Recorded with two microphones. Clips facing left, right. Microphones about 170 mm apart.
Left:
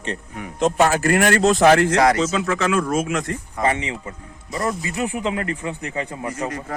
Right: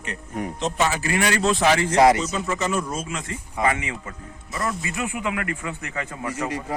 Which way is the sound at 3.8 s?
20° left (ahead or behind).